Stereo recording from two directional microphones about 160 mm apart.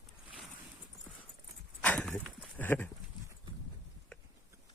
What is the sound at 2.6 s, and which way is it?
Clip-clop, 10° left (ahead or behind).